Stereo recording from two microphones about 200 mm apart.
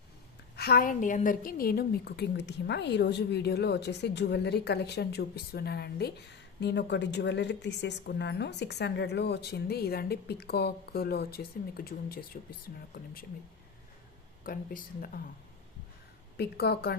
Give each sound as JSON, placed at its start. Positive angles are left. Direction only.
{"t": 0.5, "sound": "a woman's voice", "side_deg": 50}
{"t": 14.4, "sound": "a woman's voice", "side_deg": 45}
{"t": 16.4, "sound": "a woman's voice", "side_deg": 50}